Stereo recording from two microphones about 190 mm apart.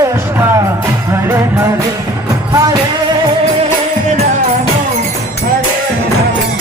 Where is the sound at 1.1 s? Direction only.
10° right (ahead or behind).